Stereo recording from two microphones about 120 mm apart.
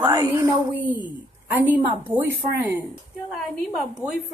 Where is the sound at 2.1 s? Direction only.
15° right (ahead or behind).